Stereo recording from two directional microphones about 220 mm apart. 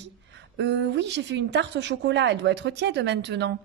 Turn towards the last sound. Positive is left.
turn(degrees=-50)  # may be behind; listen again after turning